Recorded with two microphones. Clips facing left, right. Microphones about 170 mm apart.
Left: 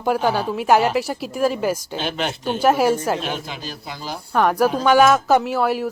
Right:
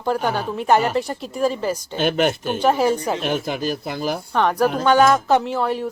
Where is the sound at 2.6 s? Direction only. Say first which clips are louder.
Left 2 dB; 5° left (ahead or behind).